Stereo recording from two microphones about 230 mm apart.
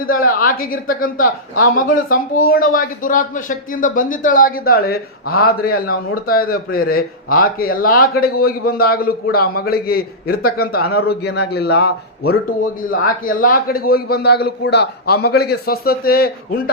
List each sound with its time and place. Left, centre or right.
0.0 s speech: left